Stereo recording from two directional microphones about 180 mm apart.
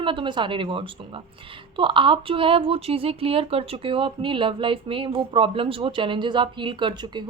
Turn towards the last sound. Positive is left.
turn(degrees=-25)  # may be behind; listen again after turning